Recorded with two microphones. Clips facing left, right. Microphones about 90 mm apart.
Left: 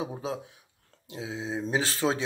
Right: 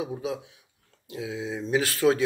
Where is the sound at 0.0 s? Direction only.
30° left (ahead or behind).